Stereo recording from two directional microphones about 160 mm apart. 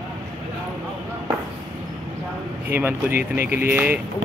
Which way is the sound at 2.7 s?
10° right (ahead or behind).